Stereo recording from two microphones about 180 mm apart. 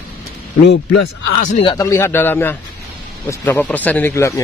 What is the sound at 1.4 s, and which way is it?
Speech, 45° left (ahead or behind).